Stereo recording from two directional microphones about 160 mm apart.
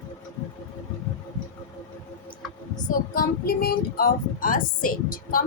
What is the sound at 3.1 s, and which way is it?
Speech, 70° left (ahead or behind).